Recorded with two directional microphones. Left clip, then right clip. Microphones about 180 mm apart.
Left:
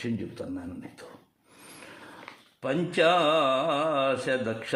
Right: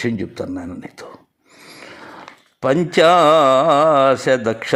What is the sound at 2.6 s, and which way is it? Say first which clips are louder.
Mantra: right 11 dB; 40° right (ahead or behind).